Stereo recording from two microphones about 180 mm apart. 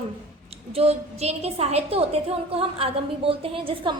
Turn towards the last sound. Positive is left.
turn(degrees=-30)  # may be behind; listen again after turning